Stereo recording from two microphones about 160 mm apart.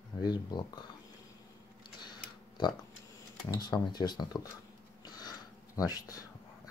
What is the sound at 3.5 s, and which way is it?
Speech, 25° left (ahead or behind).